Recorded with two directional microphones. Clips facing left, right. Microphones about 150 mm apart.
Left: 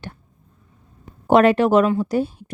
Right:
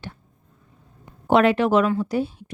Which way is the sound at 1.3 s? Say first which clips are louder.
Left 3 dB; 40° left (ahead or behind).